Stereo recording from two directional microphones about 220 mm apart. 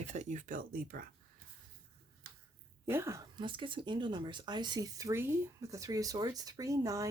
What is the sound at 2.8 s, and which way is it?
Speech, 10° right (ahead or behind).